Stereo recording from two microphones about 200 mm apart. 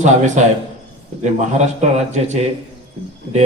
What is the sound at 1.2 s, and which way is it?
A man's voice, 35° right (ahead or behind).